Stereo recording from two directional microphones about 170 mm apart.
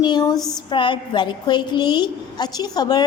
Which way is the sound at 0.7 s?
30° left (ahead or behind).